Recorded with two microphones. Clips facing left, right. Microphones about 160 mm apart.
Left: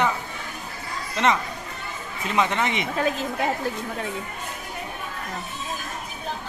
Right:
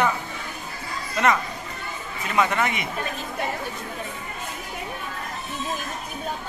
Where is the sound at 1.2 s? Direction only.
25° left (ahead or behind).